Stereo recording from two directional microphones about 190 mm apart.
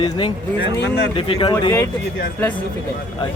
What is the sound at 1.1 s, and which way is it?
Speech, 30° left (ahead or behind).